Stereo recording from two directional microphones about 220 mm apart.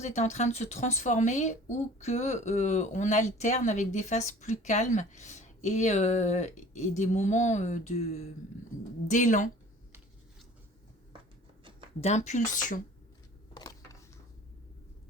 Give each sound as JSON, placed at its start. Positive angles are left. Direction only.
{"t": 0.0, "sound": "speech", "side_deg": 30}
{"t": 11.9, "sound": "speech", "side_deg": 30}
{"t": 13.5, "sound": "a sound", "side_deg": 20}